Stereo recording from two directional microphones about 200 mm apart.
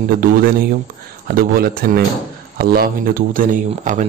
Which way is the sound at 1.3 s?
50° right (ahead or behind).